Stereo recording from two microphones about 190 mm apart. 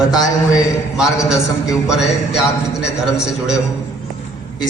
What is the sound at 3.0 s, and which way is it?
Speech, 5° right (ahead or behind).